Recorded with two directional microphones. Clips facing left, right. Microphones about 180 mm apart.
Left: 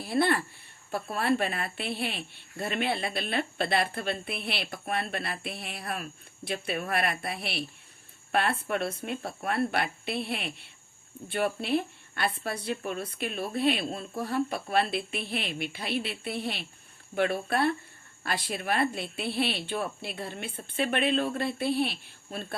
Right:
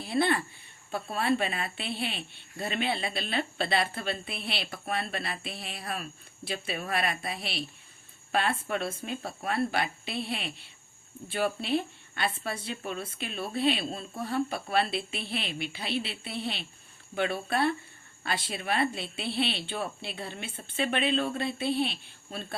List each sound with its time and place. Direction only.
0.1 s speech: 50° left (ahead or behind)
14.7 s speech: 50° left (ahead or behind)